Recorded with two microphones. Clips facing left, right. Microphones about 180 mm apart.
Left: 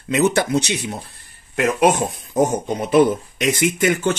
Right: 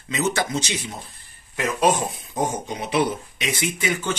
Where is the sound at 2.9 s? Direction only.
45° left (ahead or behind).